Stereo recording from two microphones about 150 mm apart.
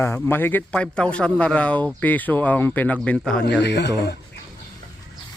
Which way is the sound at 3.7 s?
90° left.